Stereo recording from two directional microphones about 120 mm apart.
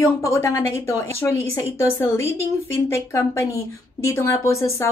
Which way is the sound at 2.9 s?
25° left (ahead or behind).